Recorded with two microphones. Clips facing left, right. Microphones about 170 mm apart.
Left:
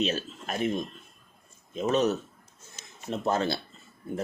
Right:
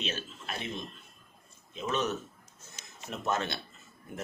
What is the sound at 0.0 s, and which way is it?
Speech, 40° left (ahead or behind).